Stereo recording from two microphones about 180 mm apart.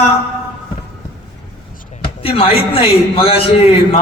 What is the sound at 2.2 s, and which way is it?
A man's voice, 30° left (ahead or behind).